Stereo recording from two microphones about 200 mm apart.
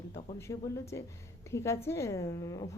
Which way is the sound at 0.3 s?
15° left (ahead or behind).